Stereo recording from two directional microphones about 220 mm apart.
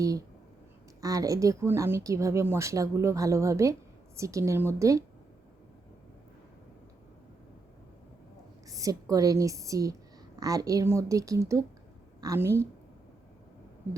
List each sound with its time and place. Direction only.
0.0 s speech: 15° right (ahead or behind)
8.7 s speech: 15° right (ahead or behind)
13.8 s a sound: 10° right (ahead or behind)